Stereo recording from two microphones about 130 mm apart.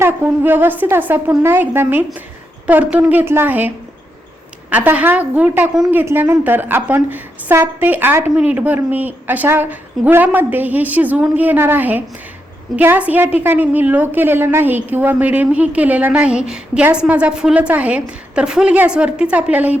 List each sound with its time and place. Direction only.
0.0 s a woman's voice: 20° right (ahead or behind)
4.7 s a woman's voice: 10° right (ahead or behind)
6.0 s a woman's voice: 15° right (ahead or behind)